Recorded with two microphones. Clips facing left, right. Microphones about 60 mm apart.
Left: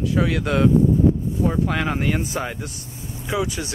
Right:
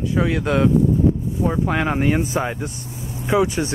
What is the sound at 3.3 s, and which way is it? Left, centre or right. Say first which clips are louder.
Speech: right 6 dB; right.